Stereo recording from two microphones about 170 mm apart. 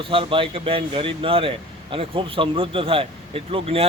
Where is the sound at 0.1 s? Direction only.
30° right (ahead or behind).